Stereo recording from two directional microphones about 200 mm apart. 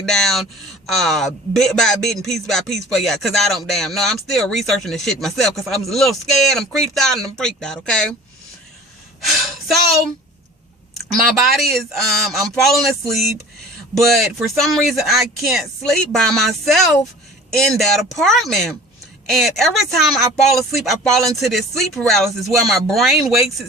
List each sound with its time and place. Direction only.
0.1 s speech: centre (ahead or behind)
10.9 s speech: centre (ahead or behind)